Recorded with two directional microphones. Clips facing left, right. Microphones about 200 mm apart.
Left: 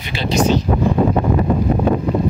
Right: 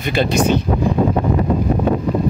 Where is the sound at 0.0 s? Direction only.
50° right (ahead or behind).